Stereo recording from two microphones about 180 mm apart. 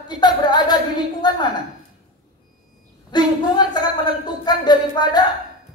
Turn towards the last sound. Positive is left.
turn(degrees=20)  # may be behind; listen again after turning